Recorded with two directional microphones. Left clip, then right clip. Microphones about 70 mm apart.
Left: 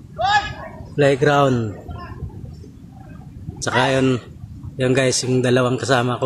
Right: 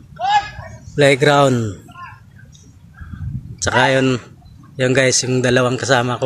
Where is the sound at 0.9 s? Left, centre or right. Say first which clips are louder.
Right 3 dB; right.